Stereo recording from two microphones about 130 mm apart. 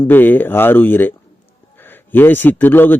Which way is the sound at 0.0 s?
15° left (ahead or behind).